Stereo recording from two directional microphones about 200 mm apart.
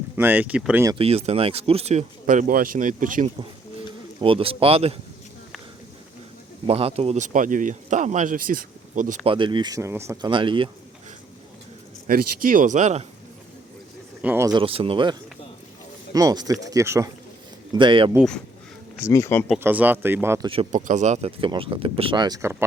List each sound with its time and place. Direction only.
0.2 s speech: 10° right (ahead or behind)
0.9 s speech: 30° right (ahead or behind)
4.2 s speech: 25° right (ahead or behind)
6.7 s speech: 30° right (ahead or behind)
9.3 s speech: 25° right (ahead or behind)
12.0 s speech: 45° right (ahead or behind)
14.2 s speech: 10° right (ahead or behind); by 15.1 s 25° right (ahead or behind)
16.1 s speech: 20° right (ahead or behind)
19.0 s speech: 10° left (ahead or behind)
19.5 s speech: 10° right (ahead or behind)
20.5 s speech: 35° right (ahead or behind); by 22.5 s 15° right (ahead or behind)